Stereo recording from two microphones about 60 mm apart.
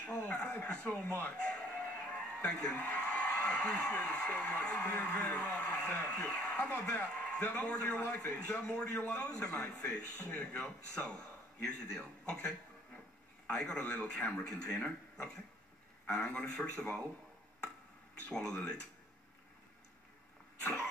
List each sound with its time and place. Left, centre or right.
0.0 s a man's voice: left
18.3 s a man's voice: centre